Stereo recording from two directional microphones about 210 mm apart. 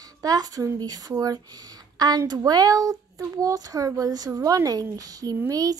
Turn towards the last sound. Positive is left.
turn(degrees=-15)  # may be behind; listen again after turning